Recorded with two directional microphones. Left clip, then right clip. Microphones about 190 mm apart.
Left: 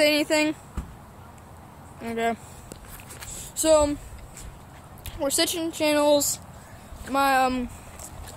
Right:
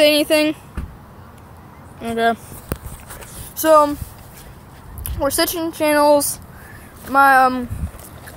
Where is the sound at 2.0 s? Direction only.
10° right (ahead or behind).